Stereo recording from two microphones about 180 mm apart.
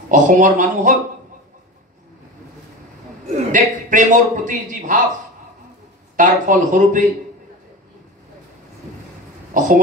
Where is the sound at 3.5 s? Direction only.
45° right (ahead or behind).